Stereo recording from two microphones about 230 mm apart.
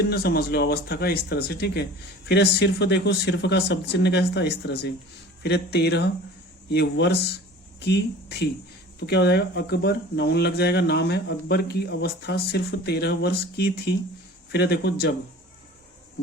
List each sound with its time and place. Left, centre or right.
0.0 s speech: left